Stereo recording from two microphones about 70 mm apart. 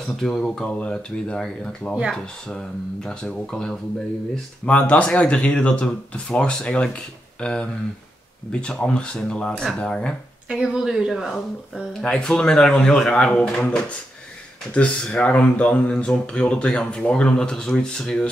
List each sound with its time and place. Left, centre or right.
0.2 s speech: centre
10.5 s speech: centre
11.3 s speech: centre